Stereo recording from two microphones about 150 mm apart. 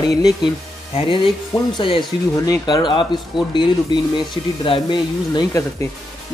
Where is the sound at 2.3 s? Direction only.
25° left (ahead or behind).